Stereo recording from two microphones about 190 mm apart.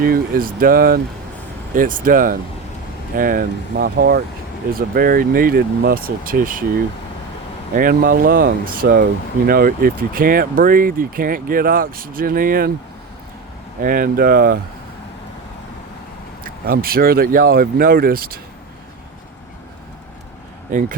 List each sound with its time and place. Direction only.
0.0 s speech: 50° right (ahead or behind)
7.8 s speech: 50° right (ahead or behind)
13.8 s speech: 50° right (ahead or behind)
16.4 s speech: 50° right (ahead or behind)
20.7 s speech: 45° right (ahead or behind)